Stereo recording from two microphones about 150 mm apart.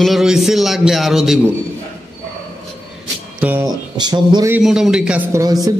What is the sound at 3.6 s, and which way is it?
Speech, 25° right (ahead or behind).